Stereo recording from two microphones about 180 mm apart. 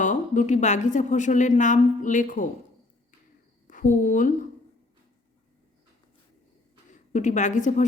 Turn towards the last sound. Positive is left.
turn(degrees=45)  # may be behind; listen again after turning